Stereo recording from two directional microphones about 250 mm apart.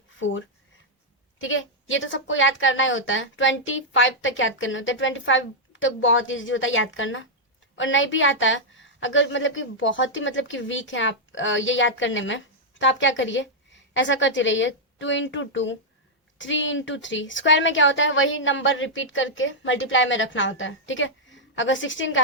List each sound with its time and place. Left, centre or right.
0.2 s speech: left
1.4 s a woman's voice: left